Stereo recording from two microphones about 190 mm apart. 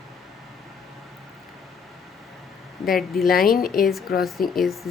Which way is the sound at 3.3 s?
50° left (ahead or behind).